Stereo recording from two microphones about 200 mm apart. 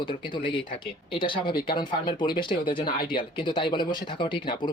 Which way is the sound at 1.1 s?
25° left (ahead or behind).